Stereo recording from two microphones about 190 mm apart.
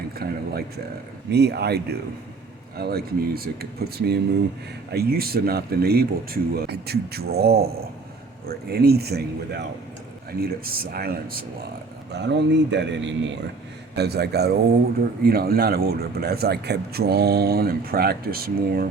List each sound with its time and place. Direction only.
0.2 s speech: 55° right (ahead or behind)
12.1 s speech: 65° right (ahead or behind)
13.9 s speech: 60° right (ahead or behind)